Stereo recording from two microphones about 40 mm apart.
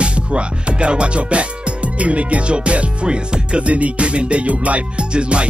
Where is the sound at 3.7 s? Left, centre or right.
Right.